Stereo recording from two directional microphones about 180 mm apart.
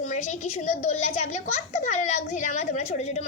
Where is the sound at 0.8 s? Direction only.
40° left (ahead or behind).